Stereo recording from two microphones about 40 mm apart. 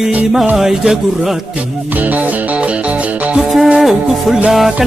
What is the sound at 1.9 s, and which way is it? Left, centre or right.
Music, right.